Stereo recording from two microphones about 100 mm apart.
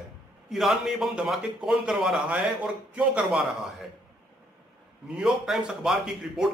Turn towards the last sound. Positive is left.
turn(degrees=-5)  # may be behind; listen again after turning